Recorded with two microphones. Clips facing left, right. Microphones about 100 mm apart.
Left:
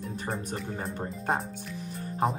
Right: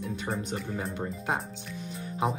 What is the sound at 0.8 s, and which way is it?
Speech, 35° left (ahead or behind).